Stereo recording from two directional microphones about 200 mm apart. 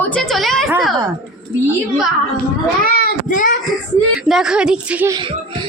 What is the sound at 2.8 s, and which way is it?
Child singing, 45° left (ahead or behind).